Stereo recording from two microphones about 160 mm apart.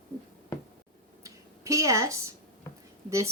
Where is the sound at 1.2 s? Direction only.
20° right (ahead or behind).